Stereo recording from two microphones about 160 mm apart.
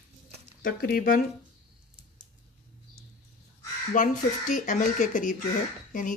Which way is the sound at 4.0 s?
50° left (ahead or behind).